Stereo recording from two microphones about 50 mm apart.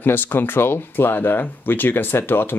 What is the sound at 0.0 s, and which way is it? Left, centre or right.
Speech, left.